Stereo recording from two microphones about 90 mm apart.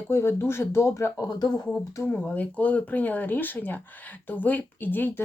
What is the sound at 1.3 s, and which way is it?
Speech, 50° left (ahead or behind).